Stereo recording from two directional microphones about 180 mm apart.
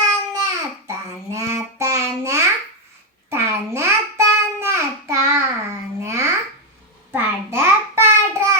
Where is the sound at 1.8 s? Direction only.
15° right (ahead or behind).